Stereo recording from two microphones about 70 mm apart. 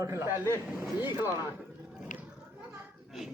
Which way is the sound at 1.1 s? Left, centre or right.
Right.